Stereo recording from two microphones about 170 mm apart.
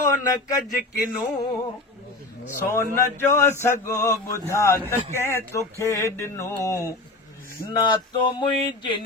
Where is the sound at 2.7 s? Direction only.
15° left (ahead or behind).